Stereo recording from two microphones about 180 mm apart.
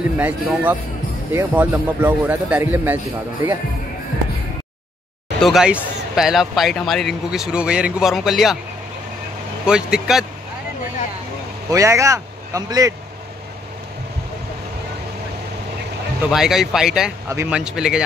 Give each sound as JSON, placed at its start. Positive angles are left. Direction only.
{"t": 0.2, "sound": "a man's voice", "side_deg": -10}
{"t": 5.4, "sound": "a man's voice", "side_deg": 0}
{"t": 9.7, "sound": "a man's voice", "side_deg": -5}
{"t": 11.7, "sound": "a man's voice", "side_deg": -15}
{"t": 16.3, "sound": "a man's voice", "side_deg": 0}